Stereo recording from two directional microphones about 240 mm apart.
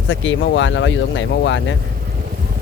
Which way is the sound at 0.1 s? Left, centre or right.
Left.